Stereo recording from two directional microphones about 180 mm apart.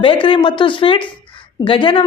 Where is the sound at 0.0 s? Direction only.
30° left (ahead or behind).